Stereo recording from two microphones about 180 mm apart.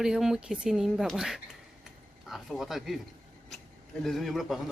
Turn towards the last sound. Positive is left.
turn(degrees=0)  # may be behind; listen again after turning